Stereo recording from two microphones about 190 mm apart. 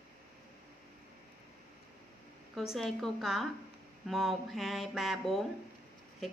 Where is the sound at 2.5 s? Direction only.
Centre (ahead or behind).